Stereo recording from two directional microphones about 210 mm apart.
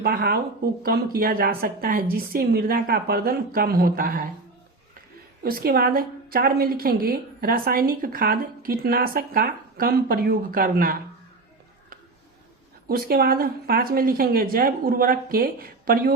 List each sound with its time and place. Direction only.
0.0 s a woman's voice: 45° right (ahead or behind)
5.4 s a woman's voice: 45° right (ahead or behind)
12.9 s a woman's voice: 45° right (ahead or behind)